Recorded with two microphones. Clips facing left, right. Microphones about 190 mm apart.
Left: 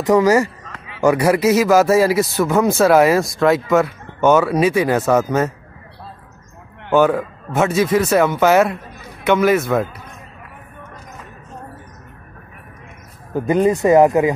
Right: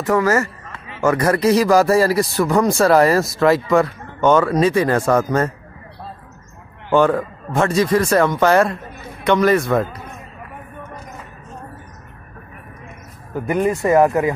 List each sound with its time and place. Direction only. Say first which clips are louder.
0.0 s speech: left 4 dB; 15° left (ahead or behind)
6.9 s speech: left 1 dB; 5° left (ahead or behind)
13.3 s speech: left 3 dB; 20° left (ahead or behind)